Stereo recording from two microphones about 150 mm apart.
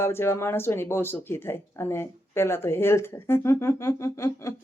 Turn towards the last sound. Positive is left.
turn(degrees=20)  # may be behind; listen again after turning